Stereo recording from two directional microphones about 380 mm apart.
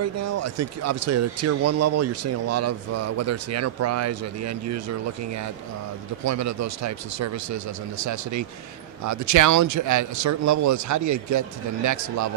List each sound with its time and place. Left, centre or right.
0.0 s speech: right